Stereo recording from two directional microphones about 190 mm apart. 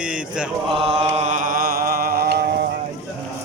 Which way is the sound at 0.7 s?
30° right (ahead or behind).